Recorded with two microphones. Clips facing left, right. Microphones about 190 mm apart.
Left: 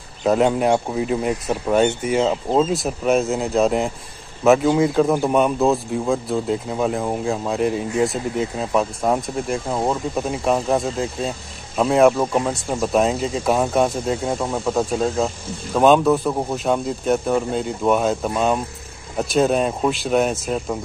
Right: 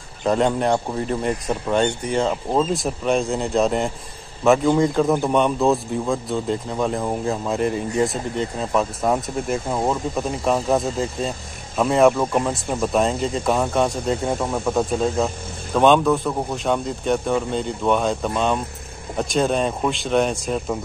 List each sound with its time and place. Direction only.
0.2 s a man's voice: 5° left (ahead or behind)